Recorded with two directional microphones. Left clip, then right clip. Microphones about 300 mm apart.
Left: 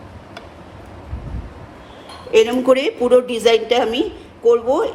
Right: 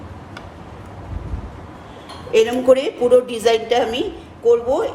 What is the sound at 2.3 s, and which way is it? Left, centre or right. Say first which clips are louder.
A woman's voice: even; centre.